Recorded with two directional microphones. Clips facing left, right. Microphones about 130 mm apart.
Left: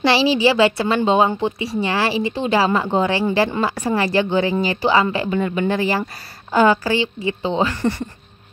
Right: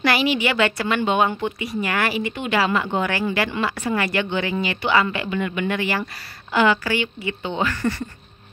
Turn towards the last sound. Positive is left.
turn(degrees=25)  # may be behind; listen again after turning